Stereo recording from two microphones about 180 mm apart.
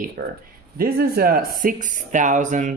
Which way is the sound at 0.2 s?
50° right (ahead or behind).